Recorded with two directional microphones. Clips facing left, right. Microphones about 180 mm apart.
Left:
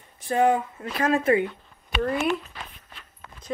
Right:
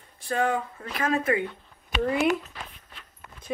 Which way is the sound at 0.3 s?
20° left (ahead or behind).